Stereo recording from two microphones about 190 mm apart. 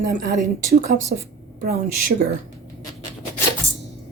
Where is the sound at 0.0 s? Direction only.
50° right (ahead or behind).